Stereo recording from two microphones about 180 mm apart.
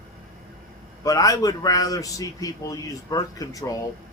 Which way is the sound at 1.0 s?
20° left (ahead or behind).